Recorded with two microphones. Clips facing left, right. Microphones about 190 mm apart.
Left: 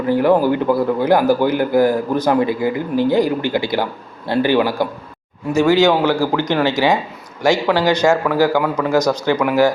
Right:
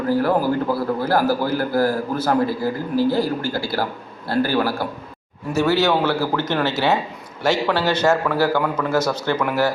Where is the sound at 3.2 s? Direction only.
15° left (ahead or behind).